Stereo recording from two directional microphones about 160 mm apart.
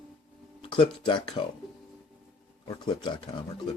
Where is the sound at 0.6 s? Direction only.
30° left (ahead or behind).